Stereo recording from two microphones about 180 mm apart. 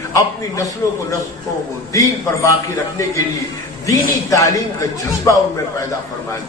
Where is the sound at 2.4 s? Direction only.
15° left (ahead or behind).